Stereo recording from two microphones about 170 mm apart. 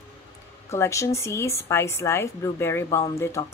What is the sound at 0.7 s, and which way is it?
Speech, 15° left (ahead or behind).